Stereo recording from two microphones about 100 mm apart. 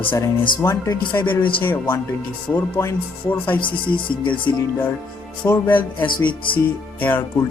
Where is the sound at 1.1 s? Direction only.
20° left (ahead or behind).